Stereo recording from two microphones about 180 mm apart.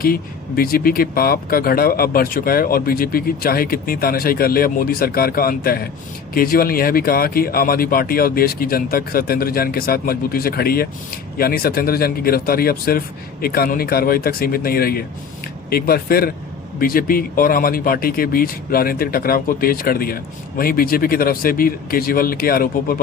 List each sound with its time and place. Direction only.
0.0 s speech: 55° left (ahead or behind)